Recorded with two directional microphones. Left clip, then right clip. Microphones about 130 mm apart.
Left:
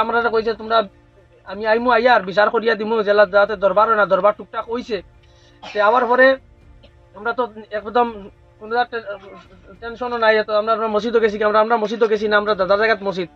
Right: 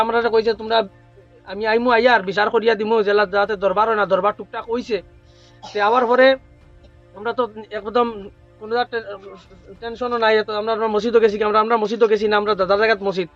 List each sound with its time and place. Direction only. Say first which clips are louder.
0.0 s a man's voice: right 1 dB; 45° right (ahead or behind)